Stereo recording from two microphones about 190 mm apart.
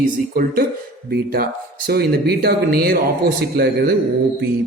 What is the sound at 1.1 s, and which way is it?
Speech, 50° right (ahead or behind).